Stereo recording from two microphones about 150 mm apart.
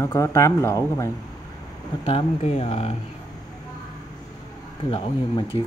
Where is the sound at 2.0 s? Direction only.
45° left (ahead or behind).